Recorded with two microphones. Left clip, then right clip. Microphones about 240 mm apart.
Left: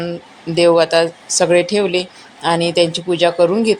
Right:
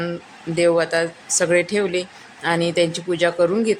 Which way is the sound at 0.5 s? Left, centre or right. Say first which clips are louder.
Left 6 dB; centre.